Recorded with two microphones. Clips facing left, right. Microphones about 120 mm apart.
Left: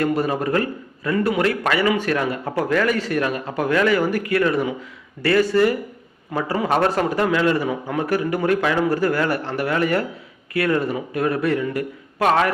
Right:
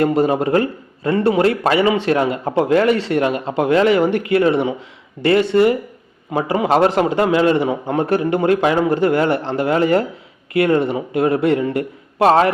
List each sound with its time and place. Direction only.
0.0 s a man's voice: 30° right (ahead or behind)